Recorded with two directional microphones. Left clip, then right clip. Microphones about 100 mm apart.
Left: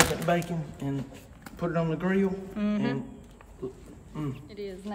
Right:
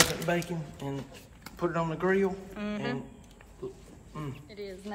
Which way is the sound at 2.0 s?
35° right (ahead or behind).